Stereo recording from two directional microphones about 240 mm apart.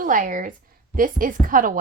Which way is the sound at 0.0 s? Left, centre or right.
Right.